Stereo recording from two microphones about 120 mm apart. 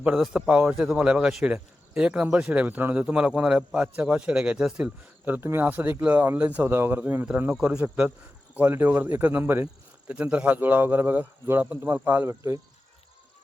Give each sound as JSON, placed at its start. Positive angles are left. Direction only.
{"t": 0.0, "sound": "a man's voice", "side_deg": -10}